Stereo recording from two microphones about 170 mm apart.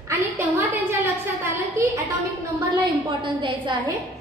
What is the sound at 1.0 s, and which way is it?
A woman's voice, 15° right (ahead or behind).